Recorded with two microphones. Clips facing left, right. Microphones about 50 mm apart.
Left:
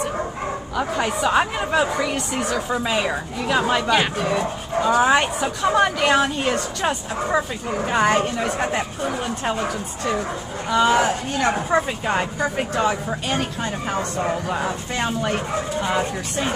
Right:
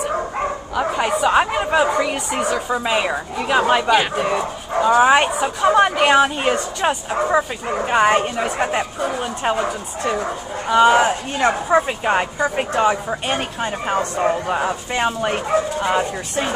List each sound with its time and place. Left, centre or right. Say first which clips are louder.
0.7 s speech: right 3 dB; centre